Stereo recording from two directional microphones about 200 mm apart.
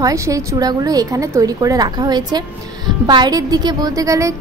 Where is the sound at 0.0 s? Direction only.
15° right (ahead or behind).